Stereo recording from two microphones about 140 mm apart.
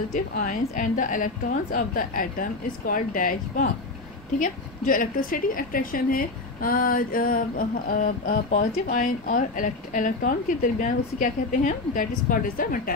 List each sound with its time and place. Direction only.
0.1 s a woman's voice: 80° left